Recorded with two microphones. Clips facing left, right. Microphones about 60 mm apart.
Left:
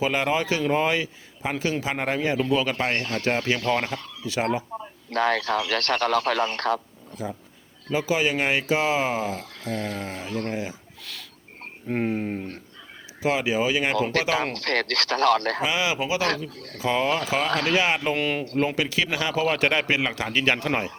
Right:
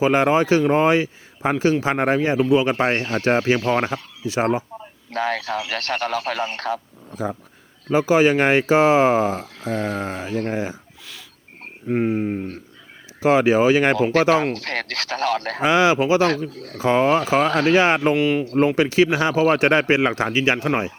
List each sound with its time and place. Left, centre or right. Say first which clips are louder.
0.0 s speech: right 7 dB; right; by 6.7 s centre
7.9 s speech: right 8 dB; right
11.9 s speech: right 5 dB; centre
13.2 s speech: right 8 dB; right
13.9 s speech: right 6 dB; right
15.6 s speech: right 8 dB; right
18.1 s speech: right 6 dB; centre
18.8 s speech: right 8 dB; right
20.3 s speech: right 4 dB; centre